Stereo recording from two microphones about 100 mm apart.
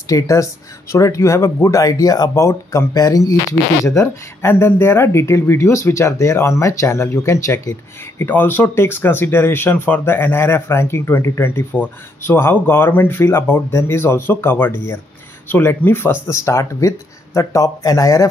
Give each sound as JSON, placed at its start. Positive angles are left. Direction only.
{"t": 0.0, "sound": "speech", "side_deg": 35}
{"t": 8.2, "sound": "speech", "side_deg": 20}